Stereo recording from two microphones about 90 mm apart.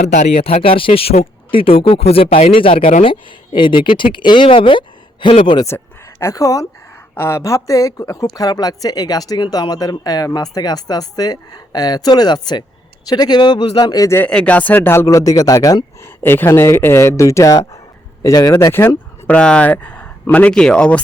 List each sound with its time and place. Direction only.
0.4 s speech: 90° left; by 5.6 s 60° left (ahead or behind)
5.6 s speech: 30° left (ahead or behind); by 13.9 s 80° left
13.9 s speech: 40° left (ahead or behind)
14.3 s speech: 15° left (ahead or behind)
14.8 s speech: 30° left (ahead or behind)
16.0 s speech: 25° left (ahead or behind); by 18.7 s 45° left (ahead or behind)
18.7 s speech: 25° left (ahead or behind)
19.4 s speech: 10° left (ahead or behind)